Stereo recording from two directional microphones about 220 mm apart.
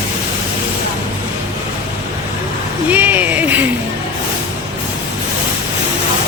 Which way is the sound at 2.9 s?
10° right (ahead or behind).